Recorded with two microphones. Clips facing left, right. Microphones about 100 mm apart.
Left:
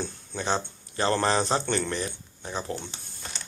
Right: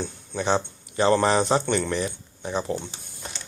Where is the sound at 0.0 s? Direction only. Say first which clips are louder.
Right 4 dB; 20° right (ahead or behind).